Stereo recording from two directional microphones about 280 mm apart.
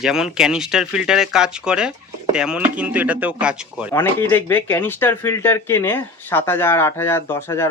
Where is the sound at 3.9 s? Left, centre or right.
Centre.